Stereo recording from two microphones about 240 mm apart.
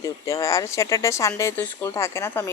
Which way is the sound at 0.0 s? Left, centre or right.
Centre.